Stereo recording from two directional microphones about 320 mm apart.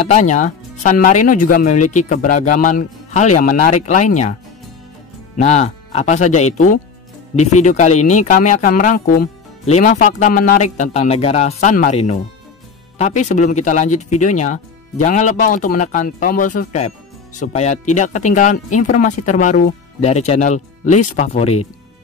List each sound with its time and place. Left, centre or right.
0.0 s speech: left
5.4 s speech: left